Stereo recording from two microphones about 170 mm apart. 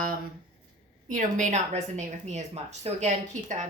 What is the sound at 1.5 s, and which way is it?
A woman's voice, 40° right (ahead or behind).